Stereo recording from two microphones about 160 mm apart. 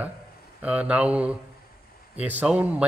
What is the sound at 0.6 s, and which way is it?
Speech, 10° right (ahead or behind).